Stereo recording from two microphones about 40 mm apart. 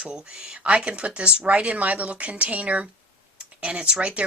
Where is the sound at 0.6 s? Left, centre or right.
Right.